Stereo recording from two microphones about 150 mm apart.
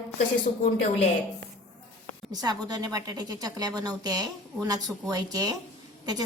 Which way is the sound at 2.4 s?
25° right (ahead or behind).